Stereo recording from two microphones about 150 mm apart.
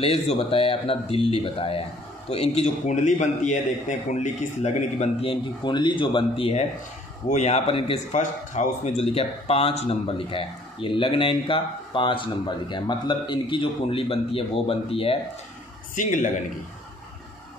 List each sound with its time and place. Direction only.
0.0 s a man's voice: 40° left (ahead or behind)
7.2 s a man's voice: 50° left (ahead or behind)
8.1 s a man's voice: 55° left (ahead or behind)
9.0 s a man's voice: 40° left (ahead or behind)
15.9 s speech: 60° left (ahead or behind)